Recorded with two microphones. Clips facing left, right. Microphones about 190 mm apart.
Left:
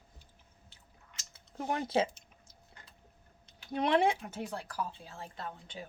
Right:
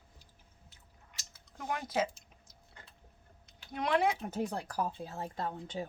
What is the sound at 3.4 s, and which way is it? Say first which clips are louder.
Typing: left 4 dB; 25° left (ahead or behind).